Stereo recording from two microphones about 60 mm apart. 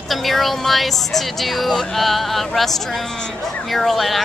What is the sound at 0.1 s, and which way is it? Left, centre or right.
Speech, centre.